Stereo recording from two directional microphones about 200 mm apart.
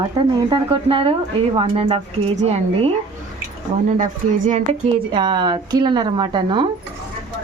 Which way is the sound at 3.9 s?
40° right (ahead or behind).